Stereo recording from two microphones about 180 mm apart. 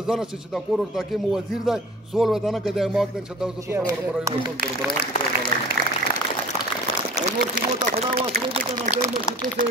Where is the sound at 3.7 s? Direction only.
15° right (ahead or behind).